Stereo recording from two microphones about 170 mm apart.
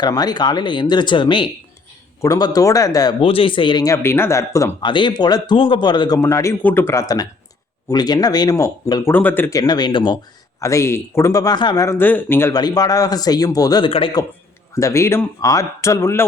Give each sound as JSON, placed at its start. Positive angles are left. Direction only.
{"t": 0.0, "sound": "a man's voice", "side_deg": 25}